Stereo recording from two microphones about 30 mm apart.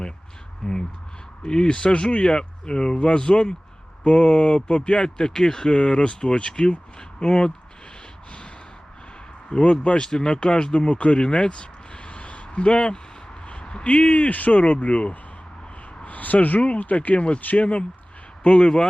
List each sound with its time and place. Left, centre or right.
0.6 s speech: centre
1.5 s speech: left
4.0 s speech: left
9.5 s speech: left
12.0 s a sound: left
13.8 s speech: left
14.3 s speech: left
14.6 s speech: left
16.0 s speech: left
17.2 s speech: left